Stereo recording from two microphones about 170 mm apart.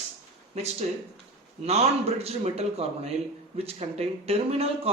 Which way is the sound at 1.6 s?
35° right (ahead or behind).